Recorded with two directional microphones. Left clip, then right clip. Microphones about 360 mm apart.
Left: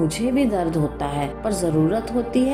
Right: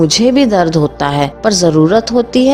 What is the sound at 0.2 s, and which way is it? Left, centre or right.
Speech, right.